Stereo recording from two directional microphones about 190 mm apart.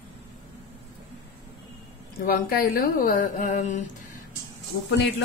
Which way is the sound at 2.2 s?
50° left (ahead or behind).